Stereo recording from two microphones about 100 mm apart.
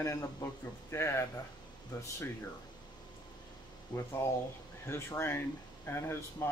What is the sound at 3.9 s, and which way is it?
Speech, 30° left (ahead or behind).